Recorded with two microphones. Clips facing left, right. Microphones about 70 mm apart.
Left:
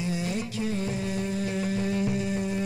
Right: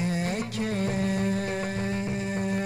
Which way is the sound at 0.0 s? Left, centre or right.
Right.